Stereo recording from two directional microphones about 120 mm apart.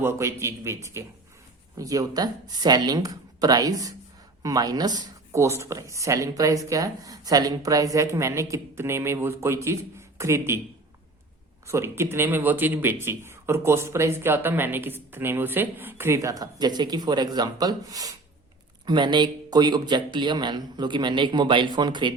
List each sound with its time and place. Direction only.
0.0 s a man's voice: 20° right (ahead or behind)
11.6 s a man's voice: 20° right (ahead or behind); by 22.1 s 40° right (ahead or behind)